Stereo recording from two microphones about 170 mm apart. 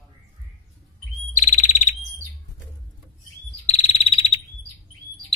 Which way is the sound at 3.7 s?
40° left (ahead or behind).